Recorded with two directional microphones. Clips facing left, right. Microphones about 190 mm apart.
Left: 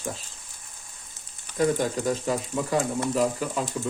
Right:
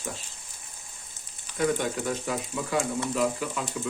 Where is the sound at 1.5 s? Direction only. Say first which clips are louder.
Left 3 dB; 35° left (ahead or behind).